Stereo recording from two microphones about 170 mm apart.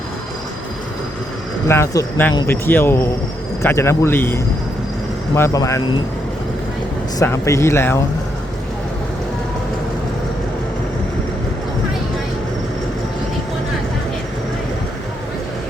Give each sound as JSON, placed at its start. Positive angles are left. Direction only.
{"t": 1.6, "sound": "speech", "side_deg": 15}
{"t": 7.2, "sound": "speech", "side_deg": 15}